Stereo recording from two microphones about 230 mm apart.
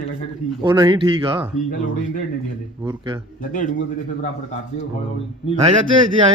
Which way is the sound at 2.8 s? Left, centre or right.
Centre.